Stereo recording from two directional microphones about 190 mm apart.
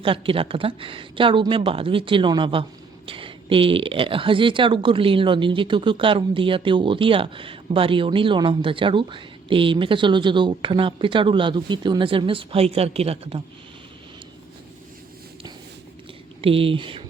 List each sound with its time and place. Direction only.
0.0 s speech: 30° right (ahead or behind)
16.4 s speech: 30° right (ahead or behind)